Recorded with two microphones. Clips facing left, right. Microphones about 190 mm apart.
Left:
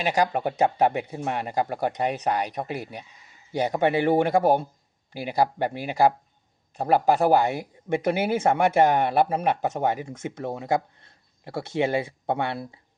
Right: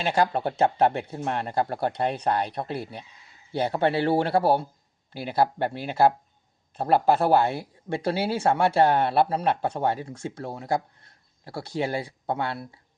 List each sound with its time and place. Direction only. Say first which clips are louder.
0.0 s speech: even; 10° left (ahead or behind)